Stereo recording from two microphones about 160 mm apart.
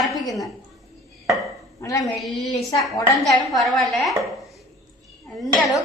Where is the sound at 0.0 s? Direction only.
Centre (ahead or behind).